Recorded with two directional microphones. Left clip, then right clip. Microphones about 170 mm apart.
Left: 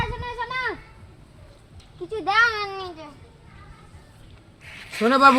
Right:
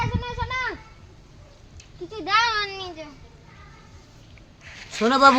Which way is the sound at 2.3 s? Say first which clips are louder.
Left 1 dB; 10° right (ahead or behind).